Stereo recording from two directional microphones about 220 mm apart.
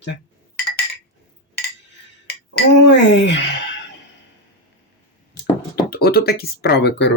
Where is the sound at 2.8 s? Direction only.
55° left (ahead or behind).